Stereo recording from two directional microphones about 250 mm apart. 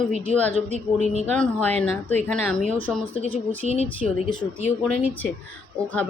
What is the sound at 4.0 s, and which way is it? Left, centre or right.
Speech, centre.